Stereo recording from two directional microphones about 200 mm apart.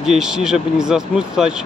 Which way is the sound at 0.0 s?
Centre (ahead or behind).